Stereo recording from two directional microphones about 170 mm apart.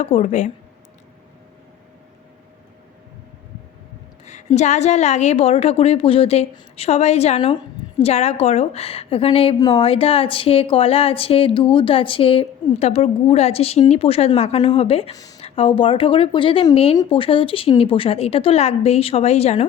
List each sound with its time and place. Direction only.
0.0 s speech: 45° left (ahead or behind)
4.3 s a woman's voice: 45° left (ahead or behind)
15.1 s speech: 20° left (ahead or behind)
15.4 s a woman's voice: 35° left (ahead or behind)